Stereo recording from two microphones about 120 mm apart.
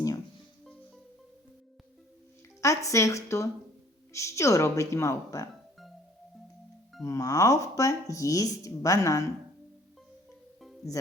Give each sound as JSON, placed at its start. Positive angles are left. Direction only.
{"t": 2.6, "sound": "speech", "side_deg": 25}
{"t": 7.0, "sound": "speech", "side_deg": 30}